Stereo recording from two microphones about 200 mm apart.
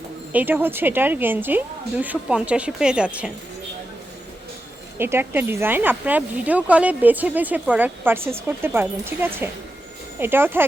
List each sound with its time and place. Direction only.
0.3 s speech: 10° right (ahead or behind)
4.9 s speech: 10° right (ahead or behind)